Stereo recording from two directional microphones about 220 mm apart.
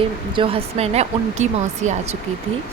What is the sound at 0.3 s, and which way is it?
Speech, 25° right (ahead or behind).